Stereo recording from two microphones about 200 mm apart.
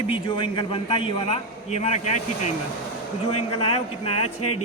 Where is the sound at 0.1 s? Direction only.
25° left (ahead or behind).